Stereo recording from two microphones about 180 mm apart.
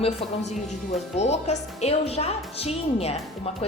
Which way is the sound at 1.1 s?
40° left (ahead or behind).